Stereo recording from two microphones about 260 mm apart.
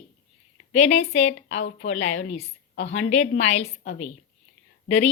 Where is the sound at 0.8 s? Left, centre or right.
Left.